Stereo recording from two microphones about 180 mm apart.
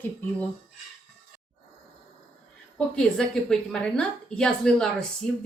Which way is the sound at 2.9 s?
5° left (ahead or behind).